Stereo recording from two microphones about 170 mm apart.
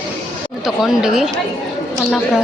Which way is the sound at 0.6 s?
5° right (ahead or behind).